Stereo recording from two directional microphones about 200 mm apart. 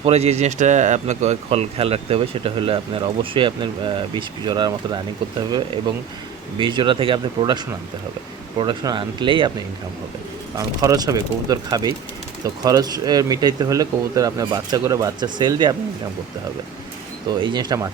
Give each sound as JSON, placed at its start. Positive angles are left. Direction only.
{"t": 0.0, "sound": "speech", "side_deg": -30}
{"t": 10.8, "sound": "speech", "side_deg": -20}
{"t": 17.2, "sound": "speech", "side_deg": -20}